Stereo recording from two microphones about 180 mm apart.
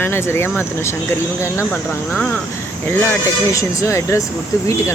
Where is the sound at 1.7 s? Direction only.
5° left (ahead or behind).